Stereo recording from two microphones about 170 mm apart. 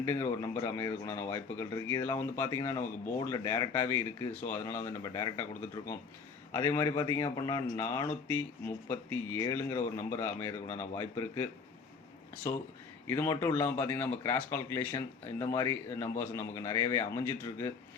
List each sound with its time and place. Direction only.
0.0 s a man's voice: 15° left (ahead or behind)
6.5 s a man's voice: 15° left (ahead or behind)
12.4 s a man's voice: 20° left (ahead or behind)